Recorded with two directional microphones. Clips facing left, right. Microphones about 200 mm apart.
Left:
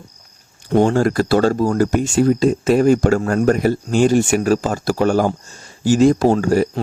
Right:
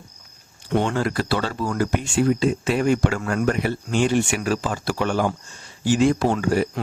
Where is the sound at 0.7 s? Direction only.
40° left (ahead or behind).